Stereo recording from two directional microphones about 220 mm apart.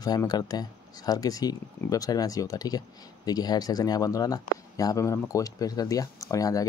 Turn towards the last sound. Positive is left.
turn(degrees=15)  # may be behind; listen again after turning